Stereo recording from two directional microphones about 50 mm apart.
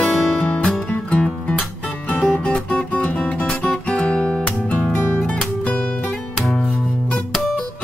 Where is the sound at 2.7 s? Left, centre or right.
Left.